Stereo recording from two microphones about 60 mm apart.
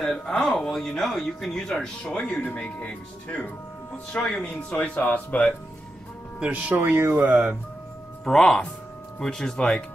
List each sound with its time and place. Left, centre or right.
0.3 s speech: centre
2.4 s speech: left
6.4 s speech: right
6.8 s speech: right
7.2 s speech: right
8.3 s speech: centre